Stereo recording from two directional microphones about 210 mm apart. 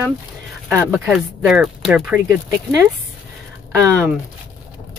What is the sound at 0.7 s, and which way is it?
Speech, 5° right (ahead or behind).